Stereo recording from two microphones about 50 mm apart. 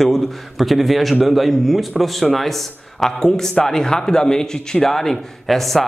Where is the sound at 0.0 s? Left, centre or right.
Centre.